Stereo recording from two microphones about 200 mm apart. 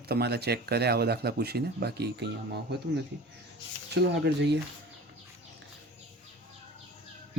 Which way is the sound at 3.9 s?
60° right (ahead or behind).